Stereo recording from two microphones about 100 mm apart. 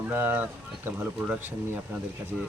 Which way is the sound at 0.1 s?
20° right (ahead or behind).